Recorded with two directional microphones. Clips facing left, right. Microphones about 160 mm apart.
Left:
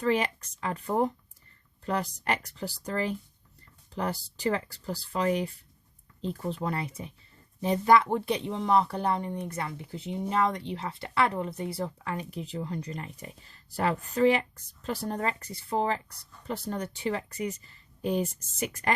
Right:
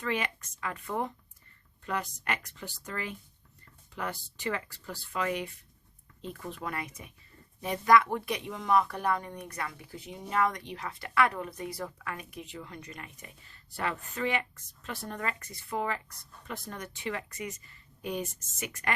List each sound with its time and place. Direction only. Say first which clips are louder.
0.0 s speech: left 6 dB; 35° left (ahead or behind)